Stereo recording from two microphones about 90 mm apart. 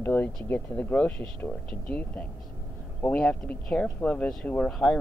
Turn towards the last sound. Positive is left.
turn(degrees=10)  # may be behind; listen again after turning